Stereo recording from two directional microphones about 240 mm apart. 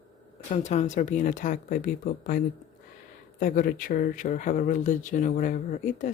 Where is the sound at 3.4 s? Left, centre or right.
Left.